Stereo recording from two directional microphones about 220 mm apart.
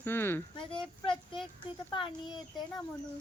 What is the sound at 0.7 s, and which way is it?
Speech, 25° left (ahead or behind).